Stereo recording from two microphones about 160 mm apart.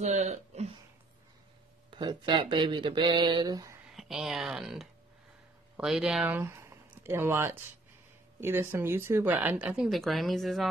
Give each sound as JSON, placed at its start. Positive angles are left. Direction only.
{"t": 0.0, "sound": "speech", "side_deg": -45}
{"t": 1.9, "sound": "speech", "side_deg": -30}
{"t": 3.9, "sound": "a woman's voice", "side_deg": 0}